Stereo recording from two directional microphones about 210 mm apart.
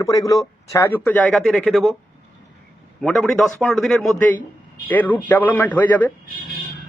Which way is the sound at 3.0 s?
Centre (ahead or behind).